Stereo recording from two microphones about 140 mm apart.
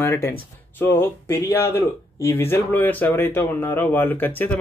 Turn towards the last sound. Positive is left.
turn(degrees=15)  # may be behind; listen again after turning